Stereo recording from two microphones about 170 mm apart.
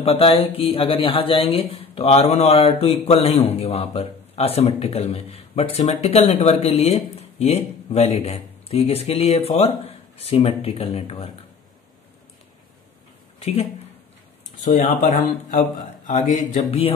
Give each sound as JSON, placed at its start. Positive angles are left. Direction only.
{"t": 0.0, "sound": "a man's voice", "side_deg": 35}
{"t": 13.4, "sound": "speech", "side_deg": 35}
{"t": 16.1, "sound": "a man's voice", "side_deg": 35}